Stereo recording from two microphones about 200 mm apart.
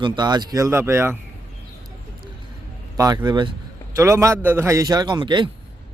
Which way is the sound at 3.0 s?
20° right (ahead or behind).